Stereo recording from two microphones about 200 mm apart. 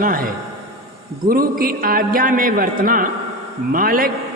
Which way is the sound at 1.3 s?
45° right (ahead or behind).